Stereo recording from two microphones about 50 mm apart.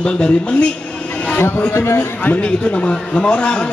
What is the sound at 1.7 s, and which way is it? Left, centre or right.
Speech, left.